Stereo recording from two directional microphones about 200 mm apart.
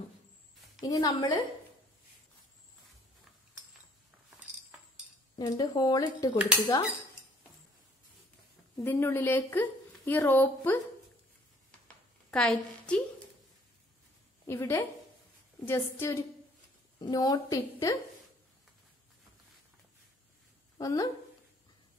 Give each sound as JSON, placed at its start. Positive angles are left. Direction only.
{"t": 0.7, "sound": "speech", "side_deg": 15}
{"t": 5.3, "sound": "speech", "side_deg": 20}
{"t": 8.7, "sound": "speech", "side_deg": 10}
{"t": 12.3, "sound": "a woman's voice", "side_deg": 5}
{"t": 14.4, "sound": "a woman's voice", "side_deg": 10}
{"t": 20.7, "sound": "a woman's voice", "side_deg": 20}